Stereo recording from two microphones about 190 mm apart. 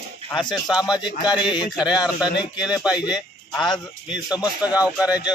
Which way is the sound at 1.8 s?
5° right (ahead or behind).